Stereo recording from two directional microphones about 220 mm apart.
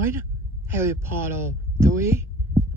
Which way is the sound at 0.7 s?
10° right (ahead or behind).